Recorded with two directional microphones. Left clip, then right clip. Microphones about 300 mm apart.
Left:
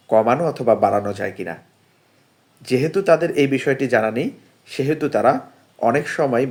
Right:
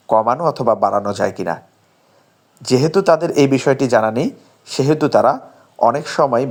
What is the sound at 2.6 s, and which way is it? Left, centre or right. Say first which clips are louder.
Speech: right 5 dB; right.